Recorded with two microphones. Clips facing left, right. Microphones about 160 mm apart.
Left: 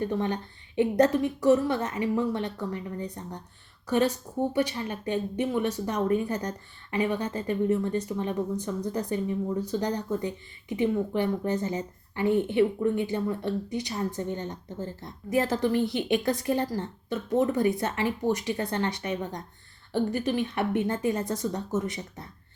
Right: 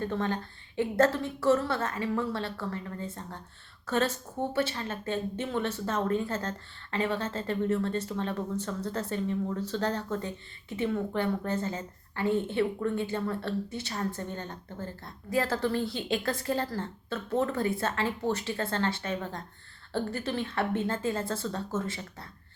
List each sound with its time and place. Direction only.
0.0 s speech: 15° left (ahead or behind)